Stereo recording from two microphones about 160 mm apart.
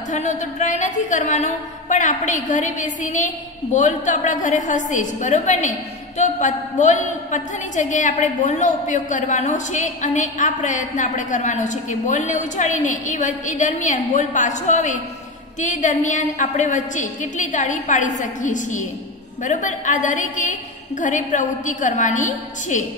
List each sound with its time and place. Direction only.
0.1 s a woman's voice: 50° left (ahead or behind)